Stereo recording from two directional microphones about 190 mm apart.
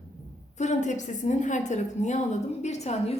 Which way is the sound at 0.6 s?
40° left (ahead or behind).